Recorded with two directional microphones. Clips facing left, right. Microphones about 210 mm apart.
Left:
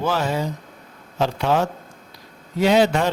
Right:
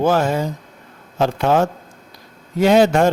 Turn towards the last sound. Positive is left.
turn(degrees=-45)  # may be behind; listen again after turning